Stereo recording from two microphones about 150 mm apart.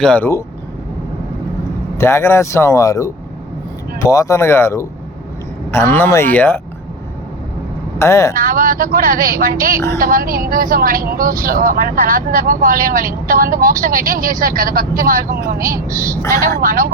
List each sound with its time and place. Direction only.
0.0 s speech: 10° left (ahead or behind)
2.0 s speech: 15° left (ahead or behind)
7.9 s speech: 20° left (ahead or behind)
8.4 s speech: 65° right (ahead or behind)
15.5 s a woman's voice: 20° right (ahead or behind)
15.9 s a woman's voice: 65° right (ahead or behind)